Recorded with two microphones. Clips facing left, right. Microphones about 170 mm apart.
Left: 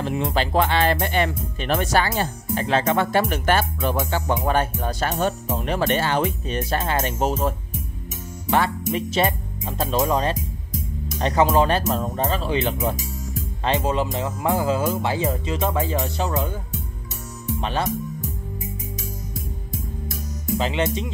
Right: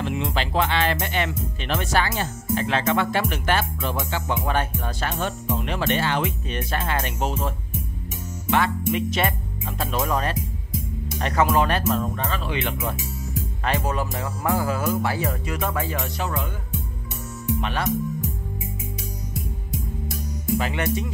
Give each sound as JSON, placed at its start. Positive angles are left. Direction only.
{"t": 0.0, "sound": "speech", "side_deg": 40}
{"t": 13.7, "sound": "speech", "side_deg": 20}
{"t": 17.6, "sound": "speech", "side_deg": 30}
{"t": 20.5, "sound": "speech", "side_deg": 25}